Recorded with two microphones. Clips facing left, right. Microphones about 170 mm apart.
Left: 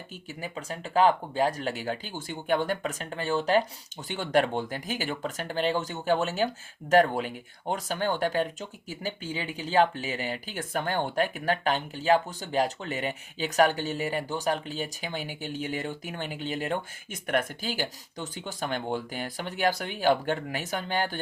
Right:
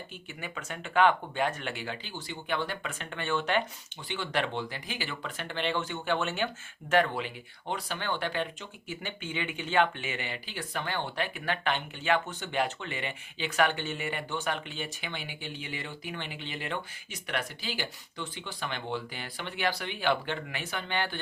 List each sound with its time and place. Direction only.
0.4 s speech: 35° left (ahead or behind)